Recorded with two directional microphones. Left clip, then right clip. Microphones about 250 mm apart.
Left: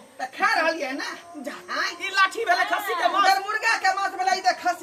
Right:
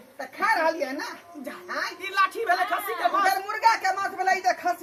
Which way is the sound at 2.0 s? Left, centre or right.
Centre.